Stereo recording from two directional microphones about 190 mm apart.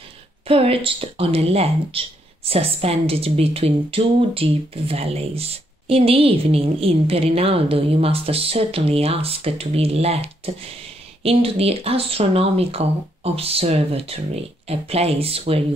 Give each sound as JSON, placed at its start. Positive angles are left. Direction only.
{"t": 0.5, "sound": "speech", "side_deg": -30}